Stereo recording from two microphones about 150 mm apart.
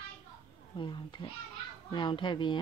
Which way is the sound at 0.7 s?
35° left (ahead or behind).